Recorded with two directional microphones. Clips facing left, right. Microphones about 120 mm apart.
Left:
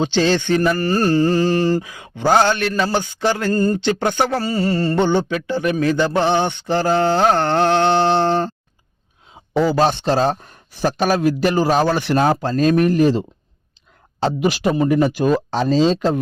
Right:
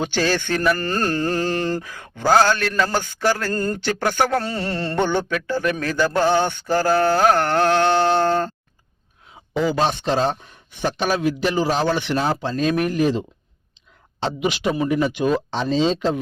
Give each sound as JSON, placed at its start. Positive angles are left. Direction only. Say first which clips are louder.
{"t": 0.0, "sound": "mantra", "louder": "left 4 dB", "side_deg": 20}
{"t": 4.9, "sound": "mantra", "louder": "left 3 dB", "side_deg": 15}
{"t": 9.6, "sound": "speech", "louder": "left 4 dB", "side_deg": 35}